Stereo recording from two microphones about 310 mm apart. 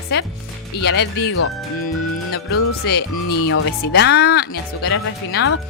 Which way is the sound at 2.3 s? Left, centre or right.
Left.